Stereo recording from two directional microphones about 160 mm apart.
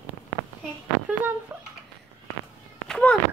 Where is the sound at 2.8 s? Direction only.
5° left (ahead or behind).